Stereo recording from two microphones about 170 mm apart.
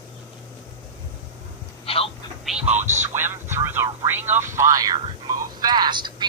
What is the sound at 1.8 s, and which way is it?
Telephone, 35° left (ahead or behind).